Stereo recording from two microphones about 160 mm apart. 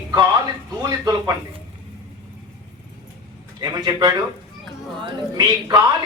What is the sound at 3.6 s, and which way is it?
A man's voice, 25° right (ahead or behind).